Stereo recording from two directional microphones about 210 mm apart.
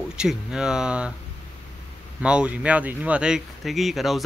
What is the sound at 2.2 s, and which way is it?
Speech, 5° right (ahead or behind).